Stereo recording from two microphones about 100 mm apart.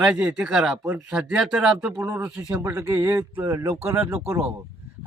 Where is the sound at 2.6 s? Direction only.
25° right (ahead or behind).